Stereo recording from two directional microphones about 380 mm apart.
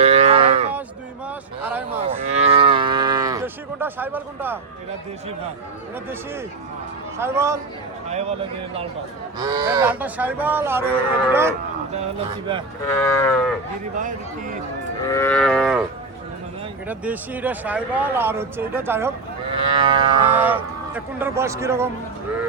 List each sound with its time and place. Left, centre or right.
0.0 s cattle: centre
1.6 s a sound: centre
2.0 s moo: centre
7.2 s speech: centre
12.9 s moo: centre
14.0 s speech: centre
15.0 s livestock: centre
16.9 s speech: centre